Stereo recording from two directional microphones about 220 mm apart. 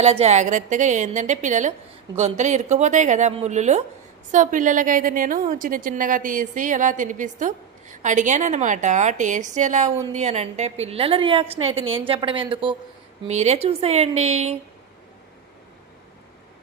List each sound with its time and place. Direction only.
0.0 s a woman's voice: 30° right (ahead or behind)